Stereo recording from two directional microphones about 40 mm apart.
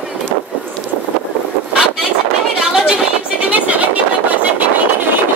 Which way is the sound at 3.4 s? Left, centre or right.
Right.